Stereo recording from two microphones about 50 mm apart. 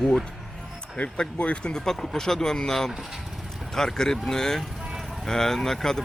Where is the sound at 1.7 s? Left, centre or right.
Centre.